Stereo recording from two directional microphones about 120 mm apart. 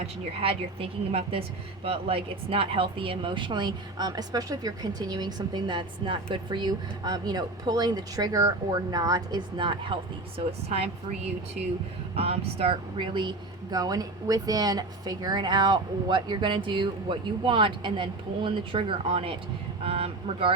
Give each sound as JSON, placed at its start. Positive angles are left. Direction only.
{"t": 0.0, "sound": "a woman's voice", "side_deg": -55}
{"t": 12.1, "sound": "a woman's voice", "side_deg": -55}